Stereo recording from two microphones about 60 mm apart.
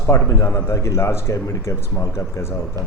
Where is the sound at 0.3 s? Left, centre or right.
Left.